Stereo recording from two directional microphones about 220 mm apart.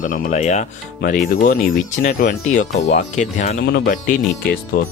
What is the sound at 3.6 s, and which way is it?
Speech, 45° left (ahead or behind).